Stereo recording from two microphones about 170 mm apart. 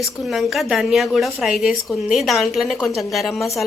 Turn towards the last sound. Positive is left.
turn(degrees=0)  # may be behind; listen again after turning